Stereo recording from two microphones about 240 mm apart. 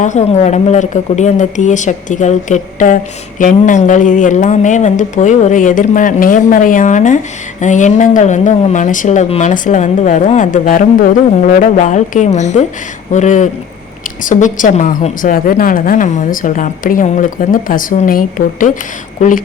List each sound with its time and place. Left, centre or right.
0.0 s a woman's voice: left